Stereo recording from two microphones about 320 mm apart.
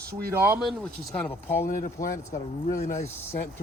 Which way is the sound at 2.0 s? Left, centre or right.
Left.